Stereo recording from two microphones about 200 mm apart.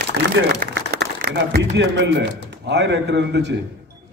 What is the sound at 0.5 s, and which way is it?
A man's voice, 55° right (ahead or behind).